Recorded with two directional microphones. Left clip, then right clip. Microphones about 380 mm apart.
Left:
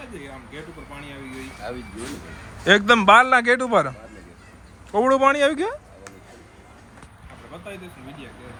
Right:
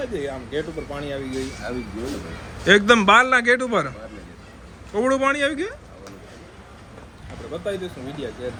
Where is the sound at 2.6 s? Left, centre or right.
Centre.